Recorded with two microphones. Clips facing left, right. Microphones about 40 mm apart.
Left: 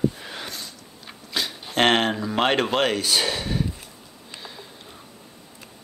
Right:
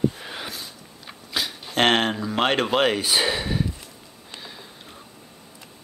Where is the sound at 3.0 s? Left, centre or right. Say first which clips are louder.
Right 1 dB; centre.